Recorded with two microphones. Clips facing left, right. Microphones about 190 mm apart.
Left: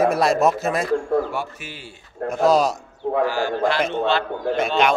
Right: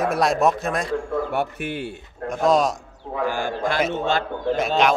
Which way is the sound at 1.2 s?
60° right (ahead or behind).